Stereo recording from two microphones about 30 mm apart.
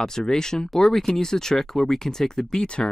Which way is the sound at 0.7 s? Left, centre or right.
Centre.